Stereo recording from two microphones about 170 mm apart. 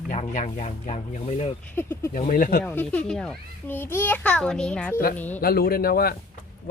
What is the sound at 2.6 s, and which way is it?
A child's voice, 10° left (ahead or behind).